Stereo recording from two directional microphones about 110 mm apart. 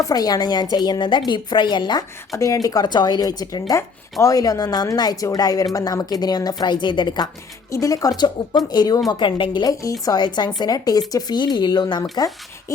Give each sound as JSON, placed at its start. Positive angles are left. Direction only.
{"t": 0.0, "sound": "a woman's voice", "side_deg": 35}
{"t": 2.3, "sound": "speech", "side_deg": 30}
{"t": 7.7, "sound": "a woman's voice", "side_deg": 30}